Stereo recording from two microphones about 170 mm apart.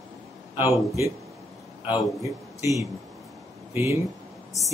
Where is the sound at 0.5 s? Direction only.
15° right (ahead or behind).